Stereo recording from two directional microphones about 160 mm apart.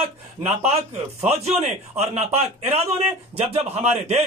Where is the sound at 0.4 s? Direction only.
45° right (ahead or behind).